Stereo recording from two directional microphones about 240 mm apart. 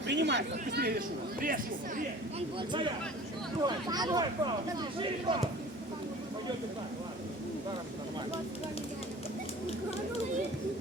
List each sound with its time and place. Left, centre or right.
0.1 s speech: right
3.6 s speech: centre